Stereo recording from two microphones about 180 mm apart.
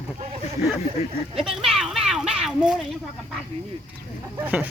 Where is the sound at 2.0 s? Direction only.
5° right (ahead or behind).